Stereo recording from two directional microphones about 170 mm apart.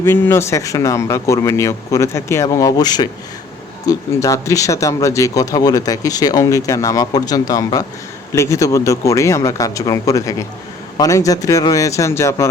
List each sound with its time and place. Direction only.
0.0 s speech: 15° left (ahead or behind)